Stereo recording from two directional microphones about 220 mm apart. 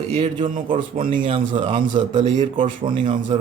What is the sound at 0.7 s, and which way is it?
Speech, 35° right (ahead or behind).